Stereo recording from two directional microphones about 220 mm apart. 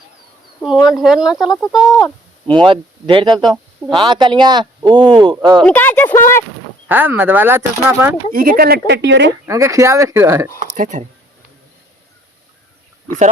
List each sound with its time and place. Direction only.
0.6 s speech: centre (ahead or behind)
2.6 s speech: 20° right (ahead or behind)
3.4 s speech: centre (ahead or behind)
3.9 s speech: 20° right (ahead or behind)
5.6 s speech: 10° left (ahead or behind)
6.8 s speech: 10° right (ahead or behind)
8.3 s speech: 40° right (ahead or behind)
9.5 s speech: 15° right (ahead or behind)
10.8 s speech: 35° right (ahead or behind)